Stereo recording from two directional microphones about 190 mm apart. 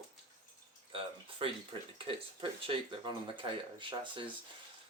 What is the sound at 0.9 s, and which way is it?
Speech, 30° right (ahead or behind).